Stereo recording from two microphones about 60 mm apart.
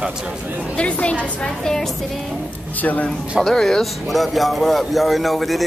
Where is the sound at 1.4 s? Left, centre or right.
Centre.